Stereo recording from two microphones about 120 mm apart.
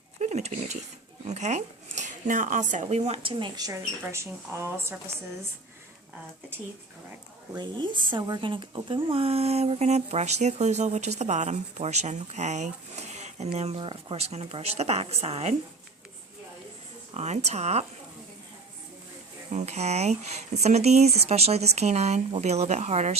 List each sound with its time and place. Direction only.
0.2 s speech: 70° right (ahead or behind)
3.2 s speech: 45° right (ahead or behind)
4.0 s speech: 25° right (ahead or behind)
7.5 s speech: 40° right (ahead or behind); by 15.5 s 60° right (ahead or behind)
17.2 s speech: 65° right (ahead or behind)
19.5 s speech: 70° right (ahead or behind)